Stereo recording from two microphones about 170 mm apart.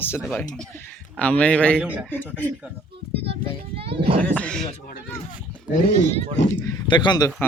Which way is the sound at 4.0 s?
35° right (ahead or behind).